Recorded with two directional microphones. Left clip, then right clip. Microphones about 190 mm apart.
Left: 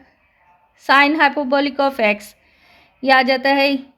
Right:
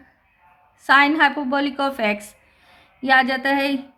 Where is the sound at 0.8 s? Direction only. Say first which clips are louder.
Left 2 dB; 30° left (ahead or behind).